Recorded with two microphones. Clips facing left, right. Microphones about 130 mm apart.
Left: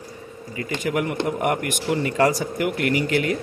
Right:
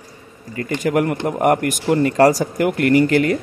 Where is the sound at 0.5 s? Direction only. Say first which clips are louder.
Right 6 dB; 45° right (ahead or behind).